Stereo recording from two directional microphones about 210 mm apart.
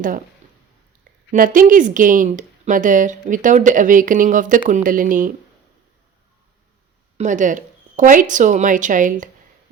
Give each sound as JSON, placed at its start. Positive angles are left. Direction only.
{"t": 1.3, "sound": "speech", "side_deg": -40}
{"t": 7.2, "sound": "speech", "side_deg": -35}